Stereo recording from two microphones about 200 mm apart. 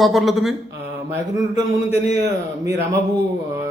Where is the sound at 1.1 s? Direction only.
15° right (ahead or behind).